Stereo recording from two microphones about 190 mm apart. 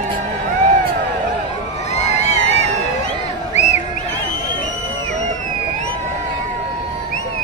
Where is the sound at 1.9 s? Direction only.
35° left (ahead or behind).